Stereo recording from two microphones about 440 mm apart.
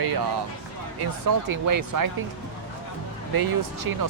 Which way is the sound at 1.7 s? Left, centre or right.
Right.